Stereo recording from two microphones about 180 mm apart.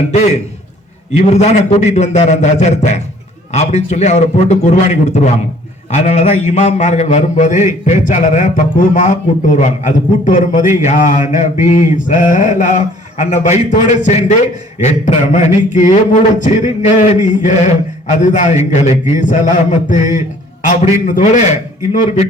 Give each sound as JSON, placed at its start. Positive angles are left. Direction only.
{"t": 1.1, "sound": "a man's voice", "side_deg": 35}